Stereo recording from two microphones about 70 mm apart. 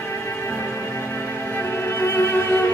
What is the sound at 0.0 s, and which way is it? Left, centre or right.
Music, left.